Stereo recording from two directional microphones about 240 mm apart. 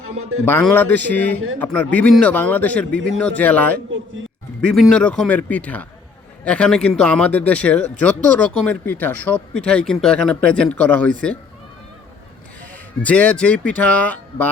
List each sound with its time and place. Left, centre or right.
0.0 s speech: right
0.4 s a man's voice: centre
13.0 s speech: centre